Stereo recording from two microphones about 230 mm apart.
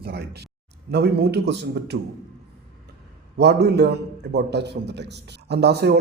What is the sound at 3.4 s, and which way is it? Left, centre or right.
A man's voice, right.